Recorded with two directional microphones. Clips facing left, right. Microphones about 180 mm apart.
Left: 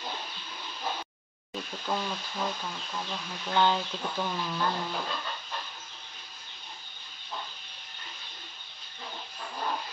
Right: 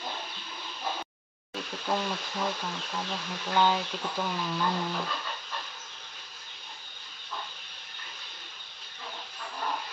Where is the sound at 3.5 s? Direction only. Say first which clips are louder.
Even; 10° right (ahead or behind).